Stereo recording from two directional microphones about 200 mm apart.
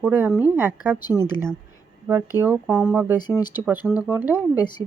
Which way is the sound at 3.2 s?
20° left (ahead or behind).